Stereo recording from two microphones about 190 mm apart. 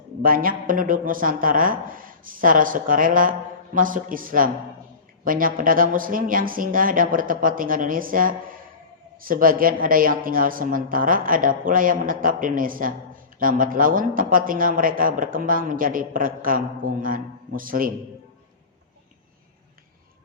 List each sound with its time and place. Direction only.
0.2 s speech: 45° right (ahead or behind)